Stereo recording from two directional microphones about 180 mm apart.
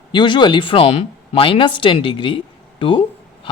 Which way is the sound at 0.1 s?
25° left (ahead or behind).